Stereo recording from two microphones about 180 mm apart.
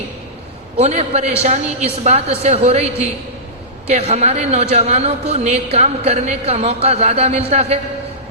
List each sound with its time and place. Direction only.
0.8 s a man's voice: 35° right (ahead or behind)